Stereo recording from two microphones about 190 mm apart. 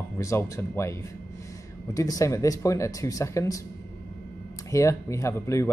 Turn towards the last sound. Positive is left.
turn(degrees=15)  # may be behind; listen again after turning